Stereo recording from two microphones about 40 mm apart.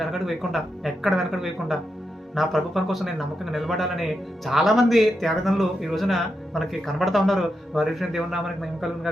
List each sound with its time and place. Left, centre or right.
0.0 s speech: centre